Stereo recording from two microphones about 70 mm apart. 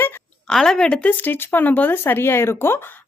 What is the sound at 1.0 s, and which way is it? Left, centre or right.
Speech, left.